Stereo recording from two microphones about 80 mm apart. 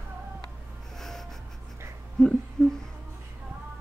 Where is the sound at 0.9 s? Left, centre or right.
Centre.